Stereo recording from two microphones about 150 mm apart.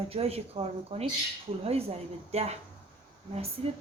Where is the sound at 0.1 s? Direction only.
40° right (ahead or behind).